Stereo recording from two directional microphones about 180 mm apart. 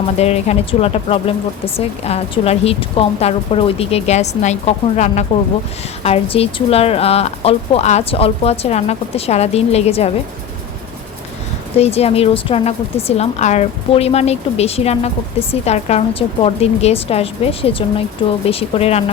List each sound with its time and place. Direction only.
0.2 s a woman's voice: 35° left (ahead or behind)
11.8 s a woman's voice: 35° left (ahead or behind)